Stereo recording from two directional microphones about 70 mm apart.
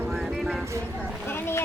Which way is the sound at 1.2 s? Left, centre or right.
Left.